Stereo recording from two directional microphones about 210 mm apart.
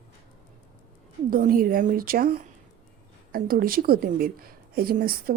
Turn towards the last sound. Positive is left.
turn(degrees=-45)  # may be behind; listen again after turning